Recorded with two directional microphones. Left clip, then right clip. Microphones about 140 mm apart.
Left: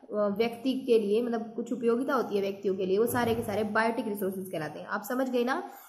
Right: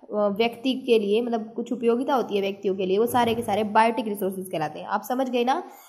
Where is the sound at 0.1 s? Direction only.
25° right (ahead or behind).